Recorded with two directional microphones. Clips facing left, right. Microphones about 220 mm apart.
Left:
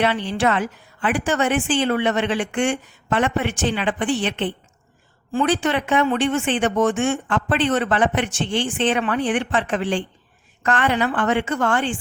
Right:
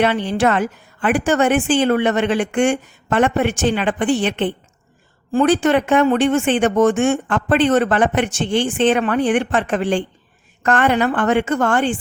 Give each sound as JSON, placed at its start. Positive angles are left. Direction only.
{"t": 0.0, "sound": "speech", "side_deg": -45}